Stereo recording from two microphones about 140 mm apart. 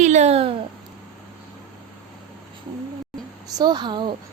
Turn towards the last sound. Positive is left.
turn(degrees=-35)  # may be behind; listen again after turning